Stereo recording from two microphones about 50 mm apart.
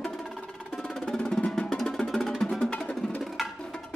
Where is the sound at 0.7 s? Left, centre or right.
Centre.